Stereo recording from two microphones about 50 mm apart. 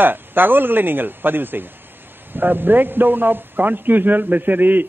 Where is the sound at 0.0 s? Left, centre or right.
Right.